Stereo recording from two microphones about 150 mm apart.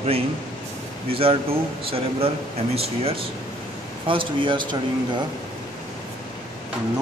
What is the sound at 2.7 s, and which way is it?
A man's voice, 40° right (ahead or behind).